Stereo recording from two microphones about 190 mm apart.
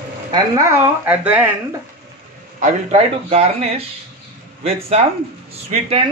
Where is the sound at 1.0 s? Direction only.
10° right (ahead or behind).